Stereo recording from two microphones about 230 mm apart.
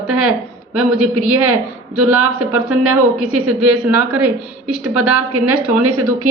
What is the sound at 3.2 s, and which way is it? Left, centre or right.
Speech, right.